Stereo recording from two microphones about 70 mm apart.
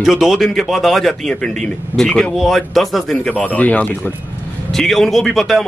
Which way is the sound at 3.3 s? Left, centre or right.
Left.